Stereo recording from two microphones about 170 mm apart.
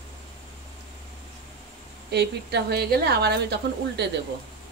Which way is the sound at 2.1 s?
75° right (ahead or behind).